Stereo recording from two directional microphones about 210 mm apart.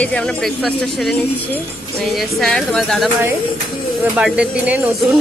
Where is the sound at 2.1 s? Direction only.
Centre (ahead or behind).